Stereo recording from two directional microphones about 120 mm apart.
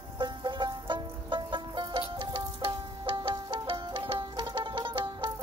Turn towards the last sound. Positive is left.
turn(degrees=-40)  # may be behind; listen again after turning